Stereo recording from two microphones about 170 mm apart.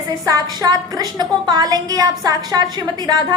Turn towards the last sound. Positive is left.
turn(degrees=-25)  # may be behind; listen again after turning